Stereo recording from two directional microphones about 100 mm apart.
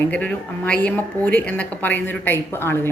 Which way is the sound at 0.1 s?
15° left (ahead or behind).